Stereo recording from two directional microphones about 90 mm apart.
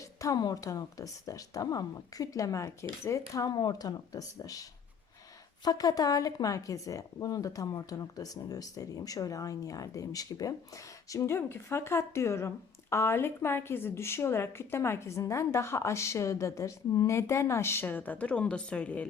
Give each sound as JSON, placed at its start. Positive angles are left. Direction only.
{"t": 0.0, "sound": "a sound", "side_deg": 35}
{"t": 0.3, "sound": "speech", "side_deg": 45}
{"t": 3.5, "sound": "speech", "side_deg": 50}
{"t": 5.6, "sound": "a woman's voice", "side_deg": 45}